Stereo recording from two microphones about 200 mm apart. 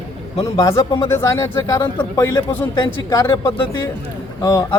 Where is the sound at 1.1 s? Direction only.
15° left (ahead or behind).